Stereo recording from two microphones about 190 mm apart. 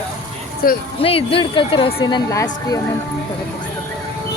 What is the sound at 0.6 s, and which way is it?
Speech, 50° left (ahead or behind).